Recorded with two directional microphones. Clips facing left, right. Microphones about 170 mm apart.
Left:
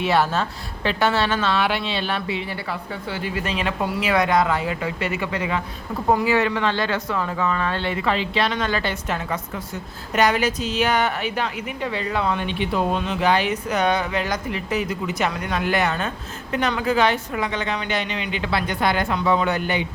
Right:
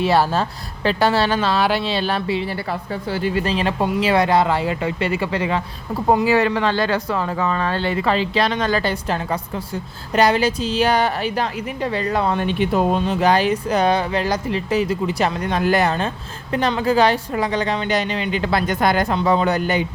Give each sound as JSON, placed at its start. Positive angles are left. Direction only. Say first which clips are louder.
{"t": 0.0, "sound": "a woman's voice", "louder": "right 3 dB", "side_deg": -35}